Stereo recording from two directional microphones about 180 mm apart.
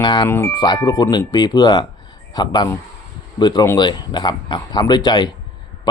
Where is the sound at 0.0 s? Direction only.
25° left (ahead or behind).